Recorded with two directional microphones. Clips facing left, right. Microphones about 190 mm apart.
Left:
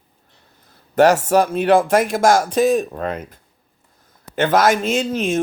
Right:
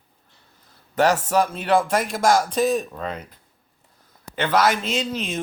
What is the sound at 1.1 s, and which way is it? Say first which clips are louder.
A man's voice: left 5 dB; 45° left (ahead or behind).